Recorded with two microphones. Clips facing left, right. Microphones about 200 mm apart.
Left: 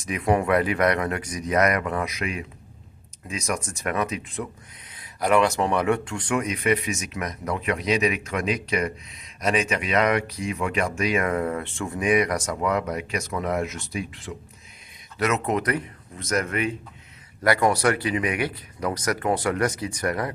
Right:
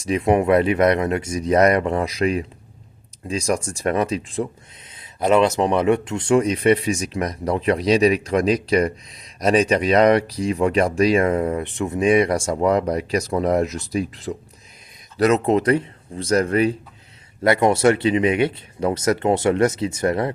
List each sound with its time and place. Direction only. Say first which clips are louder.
0.0 s speech: right 5 dB; 25° right (ahead or behind)